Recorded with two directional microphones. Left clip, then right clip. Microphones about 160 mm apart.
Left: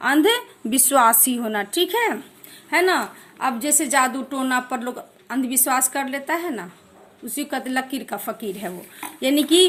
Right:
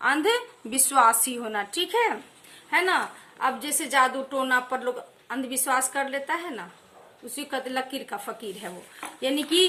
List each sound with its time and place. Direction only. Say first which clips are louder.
0.0 s a woman's voice: left 5 dB; 40° left (ahead or behind)